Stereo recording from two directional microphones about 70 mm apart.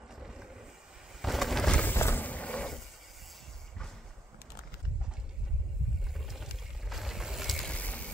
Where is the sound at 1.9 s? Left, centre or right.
Left.